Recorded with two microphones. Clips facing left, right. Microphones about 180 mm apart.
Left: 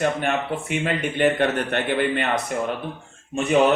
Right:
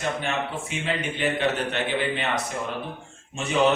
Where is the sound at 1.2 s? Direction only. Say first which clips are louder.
Left 5 dB; 55° left (ahead or behind).